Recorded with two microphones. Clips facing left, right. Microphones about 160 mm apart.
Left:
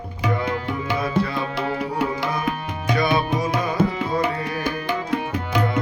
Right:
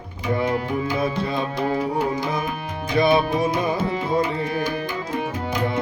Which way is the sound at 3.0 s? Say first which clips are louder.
Right 4 dB; 25° right (ahead or behind).